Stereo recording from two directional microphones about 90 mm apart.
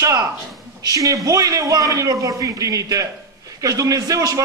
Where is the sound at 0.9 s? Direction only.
40° right (ahead or behind).